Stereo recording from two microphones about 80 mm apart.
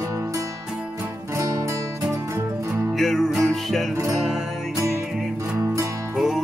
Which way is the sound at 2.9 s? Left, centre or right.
Centre.